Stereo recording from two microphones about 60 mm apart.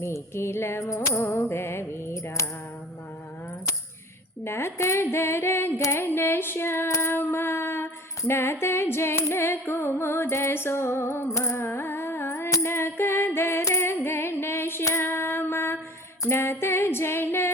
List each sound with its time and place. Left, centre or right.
0.0 s singing: left
2.2 s music: left
4.4 s singing: left
6.1 s female singing: left
6.8 s music: left
7.1 s a sound: left
8.3 s singing: left
11.3 s music: left
11.5 s music: left
12.6 s female singing: left
13.7 s a sound: left
14.9 s female singing: left